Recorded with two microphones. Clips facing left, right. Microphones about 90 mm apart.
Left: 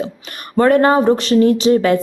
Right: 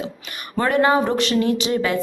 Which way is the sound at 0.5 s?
40° left (ahead or behind).